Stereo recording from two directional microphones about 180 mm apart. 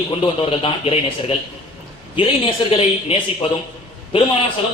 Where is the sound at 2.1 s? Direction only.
30° left (ahead or behind).